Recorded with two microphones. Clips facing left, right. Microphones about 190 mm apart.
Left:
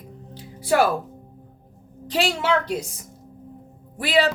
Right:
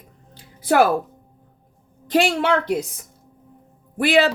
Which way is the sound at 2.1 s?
55° right (ahead or behind).